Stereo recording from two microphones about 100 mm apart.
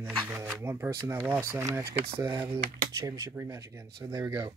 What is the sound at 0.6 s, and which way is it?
Speech, 25° right (ahead or behind).